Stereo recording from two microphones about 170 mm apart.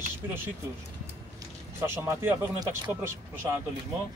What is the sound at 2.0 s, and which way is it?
Speech, 15° right (ahead or behind).